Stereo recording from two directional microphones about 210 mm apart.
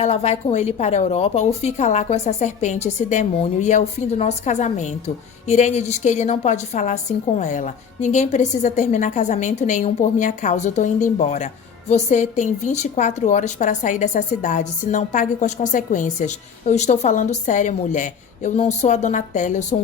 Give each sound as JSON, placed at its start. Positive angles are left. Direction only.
{"t": 0.0, "sound": "a woman's voice", "side_deg": 30}